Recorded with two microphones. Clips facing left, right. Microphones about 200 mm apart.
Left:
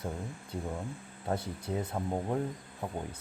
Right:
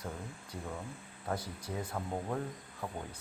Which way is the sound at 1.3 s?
25° left (ahead or behind).